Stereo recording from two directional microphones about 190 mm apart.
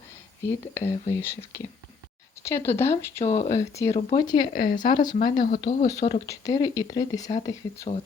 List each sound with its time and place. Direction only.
0.7 s speech: 15° left (ahead or behind)
5.1 s speech: 45° left (ahead or behind)
5.5 s speech: 25° left (ahead or behind)